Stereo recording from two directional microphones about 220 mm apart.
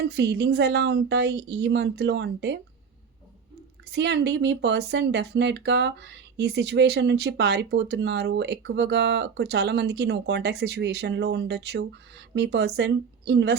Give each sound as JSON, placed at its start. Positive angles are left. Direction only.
{"t": 0.0, "sound": "speech", "side_deg": -50}
{"t": 3.9, "sound": "speech", "side_deg": -50}